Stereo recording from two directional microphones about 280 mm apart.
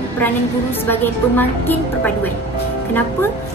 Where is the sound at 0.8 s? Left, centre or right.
Centre.